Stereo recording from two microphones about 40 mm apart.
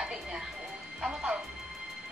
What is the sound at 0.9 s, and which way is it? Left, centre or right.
Speech, centre.